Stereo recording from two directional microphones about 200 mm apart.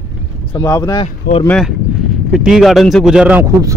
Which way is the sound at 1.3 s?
45° left (ahead or behind).